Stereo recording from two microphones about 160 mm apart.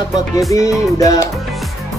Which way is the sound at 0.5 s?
20° left (ahead or behind).